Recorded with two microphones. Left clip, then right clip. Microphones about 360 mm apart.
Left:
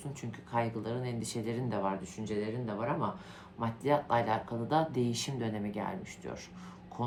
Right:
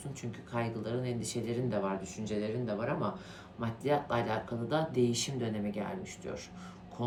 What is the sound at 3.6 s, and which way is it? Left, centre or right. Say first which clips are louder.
Speech: left 1 dB; centre.